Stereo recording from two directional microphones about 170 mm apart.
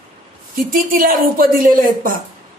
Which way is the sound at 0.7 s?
55° right (ahead or behind).